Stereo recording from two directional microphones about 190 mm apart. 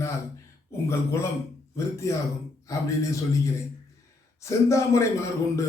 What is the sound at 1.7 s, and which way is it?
A man's voice, 15° left (ahead or behind).